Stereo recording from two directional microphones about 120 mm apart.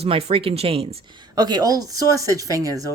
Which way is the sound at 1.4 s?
35° right (ahead or behind).